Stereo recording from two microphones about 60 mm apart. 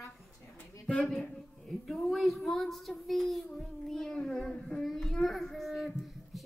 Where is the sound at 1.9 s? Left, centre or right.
Centre.